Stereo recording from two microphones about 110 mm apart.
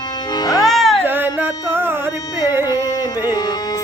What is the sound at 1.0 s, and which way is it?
Carnatic music, 20° right (ahead or behind).